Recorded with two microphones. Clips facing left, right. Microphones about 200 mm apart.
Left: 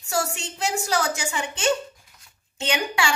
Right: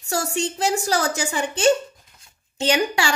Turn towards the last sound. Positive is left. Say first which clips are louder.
# right 4 dB
turn(degrees=-35)  # may be behind; listen again after turning